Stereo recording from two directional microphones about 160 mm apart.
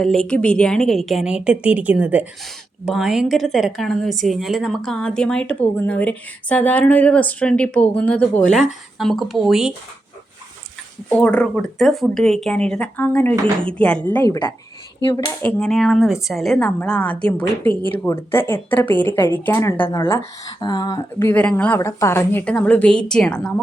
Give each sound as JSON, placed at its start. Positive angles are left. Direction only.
{"t": 0.0, "sound": "a woman's voice", "side_deg": 5}
{"t": 11.1, "sound": "a woman's voice", "side_deg": 5}
{"t": 15.0, "sound": "speech", "side_deg": 30}
{"t": 15.3, "sound": "speech", "side_deg": 10}